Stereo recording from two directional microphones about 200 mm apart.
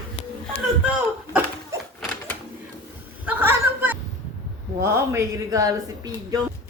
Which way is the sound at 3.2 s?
10° right (ahead or behind).